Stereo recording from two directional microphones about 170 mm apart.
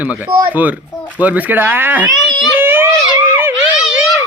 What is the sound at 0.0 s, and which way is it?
Speech, 10° right (ahead or behind).